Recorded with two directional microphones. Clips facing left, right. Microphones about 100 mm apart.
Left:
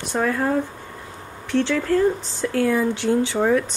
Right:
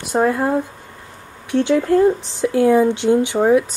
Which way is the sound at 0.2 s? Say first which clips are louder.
Right 4 dB; 20° right (ahead or behind).